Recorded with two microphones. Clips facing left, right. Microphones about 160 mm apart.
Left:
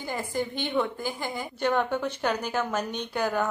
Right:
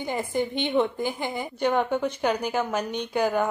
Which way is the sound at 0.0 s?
20° right (ahead or behind).